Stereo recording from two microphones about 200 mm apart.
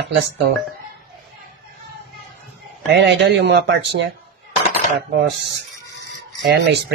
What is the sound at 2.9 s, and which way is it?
Speech, 60° right (ahead or behind).